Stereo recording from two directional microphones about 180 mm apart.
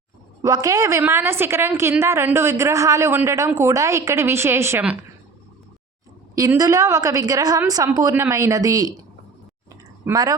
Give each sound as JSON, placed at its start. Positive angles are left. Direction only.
{"t": 0.4, "sound": "a woman's voice", "side_deg": -20}
{"t": 6.3, "sound": "a woman's voice", "side_deg": -20}
{"t": 10.1, "sound": "a woman's voice", "side_deg": -20}